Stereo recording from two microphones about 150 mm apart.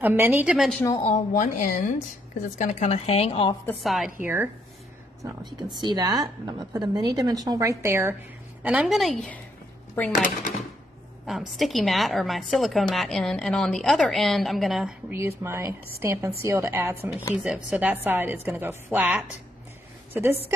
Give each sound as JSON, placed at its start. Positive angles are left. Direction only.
{"t": 0.0, "sound": "a woman's voice", "side_deg": -10}
{"t": 0.7, "sound": "a woman's voice", "side_deg": 10}
{"t": 1.1, "sound": "a woman's voice", "side_deg": 55}
{"t": 3.8, "sound": "a woman's voice", "side_deg": 0}
{"t": 5.2, "sound": "a woman's voice", "side_deg": -25}
{"t": 8.6, "sound": "a woman's voice", "side_deg": -5}
{"t": 10.1, "sound": "a woman's voice", "side_deg": 55}
{"t": 11.2, "sound": "a woman's voice", "side_deg": 0}
{"t": 15.1, "sound": "a woman's voice", "side_deg": -20}
{"t": 17.3, "sound": "a woman's voice", "side_deg": -5}